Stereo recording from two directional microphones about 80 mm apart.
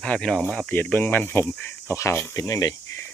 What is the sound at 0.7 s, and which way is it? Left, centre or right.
Speech, left.